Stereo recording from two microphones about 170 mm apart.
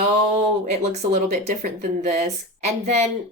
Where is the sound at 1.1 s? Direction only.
45° right (ahead or behind).